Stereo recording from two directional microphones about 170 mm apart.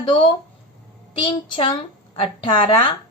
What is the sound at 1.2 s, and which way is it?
A woman's voice, 30° left (ahead or behind).